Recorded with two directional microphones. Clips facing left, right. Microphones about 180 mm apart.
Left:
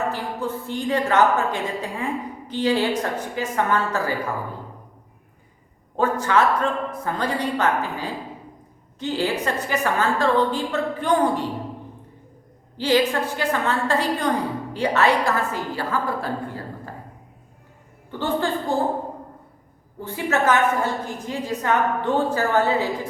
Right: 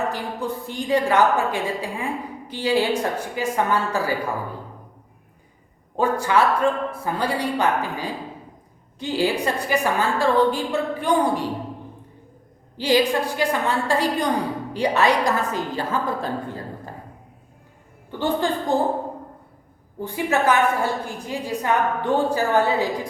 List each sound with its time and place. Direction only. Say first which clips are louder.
0.1 s a woman's voice: even; 15° right (ahead or behind)
6.0 s a woman's voice: even; 10° right (ahead or behind)
12.7 s a woman's voice: right 1 dB; 15° right (ahead or behind)
18.2 s a woman's voice: right 1 dB; 15° right (ahead or behind)
20.0 s a woman's voice: right 1 dB; 15° right (ahead or behind)